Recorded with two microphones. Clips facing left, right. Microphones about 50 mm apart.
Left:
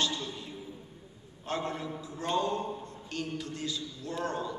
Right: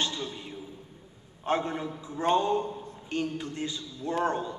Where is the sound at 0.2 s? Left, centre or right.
Right.